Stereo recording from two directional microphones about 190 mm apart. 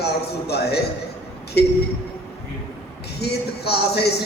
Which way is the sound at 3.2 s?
60° left (ahead or behind).